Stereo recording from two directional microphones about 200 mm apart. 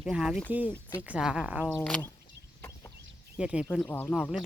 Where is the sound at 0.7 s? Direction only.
20° left (ahead or behind).